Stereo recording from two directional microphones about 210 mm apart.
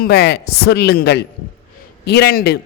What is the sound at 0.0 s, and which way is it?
Speech, 50° left (ahead or behind).